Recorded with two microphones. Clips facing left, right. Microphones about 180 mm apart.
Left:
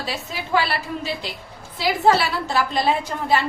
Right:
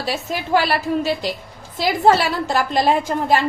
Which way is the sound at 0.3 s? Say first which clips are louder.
Right 4 dB; 90° right.